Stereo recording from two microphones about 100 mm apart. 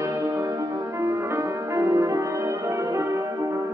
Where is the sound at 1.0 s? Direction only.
30° right (ahead or behind).